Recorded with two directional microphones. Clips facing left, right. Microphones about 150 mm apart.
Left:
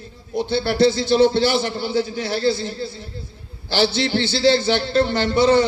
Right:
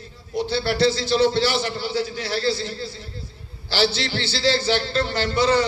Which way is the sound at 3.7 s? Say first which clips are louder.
Left 3 dB; 50° left (ahead or behind).